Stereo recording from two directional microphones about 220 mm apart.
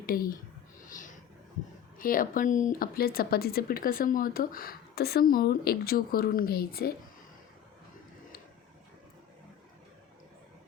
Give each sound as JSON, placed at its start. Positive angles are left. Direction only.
{"t": 0.0, "sound": "speech", "side_deg": 40}
{"t": 0.9, "sound": "a sound", "side_deg": 35}
{"t": 2.0, "sound": "speech", "side_deg": 40}